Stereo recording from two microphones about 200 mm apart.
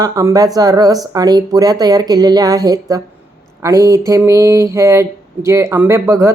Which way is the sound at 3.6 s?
15° right (ahead or behind).